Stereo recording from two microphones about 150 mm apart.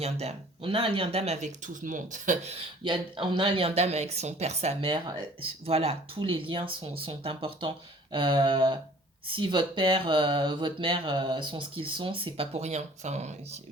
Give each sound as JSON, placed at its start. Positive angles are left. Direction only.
{"t": 0.0, "sound": "speech", "side_deg": -45}
{"t": 2.8, "sound": "speech", "side_deg": -30}